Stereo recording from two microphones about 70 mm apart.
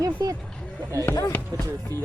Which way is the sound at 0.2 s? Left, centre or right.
Right.